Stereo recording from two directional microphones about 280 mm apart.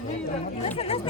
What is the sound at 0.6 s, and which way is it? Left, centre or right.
Speech, left.